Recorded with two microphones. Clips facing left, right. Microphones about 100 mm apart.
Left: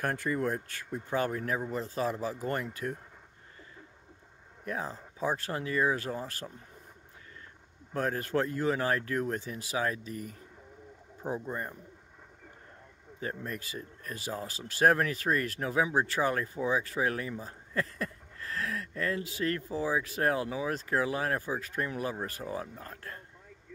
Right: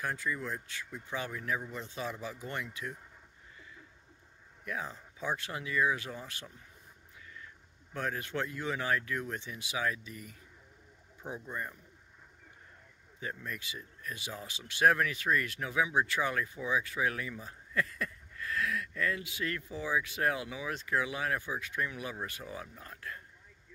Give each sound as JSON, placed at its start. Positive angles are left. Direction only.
{"t": 0.0, "sound": "speech", "side_deg": 55}
{"t": 4.6, "sound": "speech", "side_deg": 35}
{"t": 7.9, "sound": "speech", "side_deg": 40}
{"t": 13.2, "sound": "speech", "side_deg": 40}